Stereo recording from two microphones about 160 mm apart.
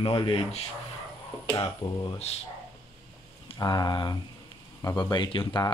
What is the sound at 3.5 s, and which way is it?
Speech, 25° left (ahead or behind).